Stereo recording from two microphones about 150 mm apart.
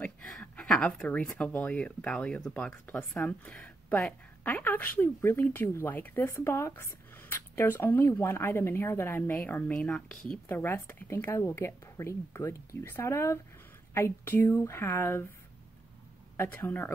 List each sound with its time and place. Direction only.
0.0 s speech: 5° left (ahead or behind)
16.3 s speech: 15° left (ahead or behind)